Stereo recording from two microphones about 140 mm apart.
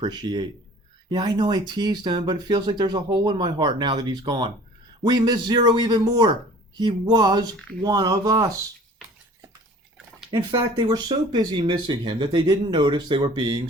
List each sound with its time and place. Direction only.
0.0 s speech: 30° right (ahead or behind)
10.5 s speech: 30° right (ahead or behind)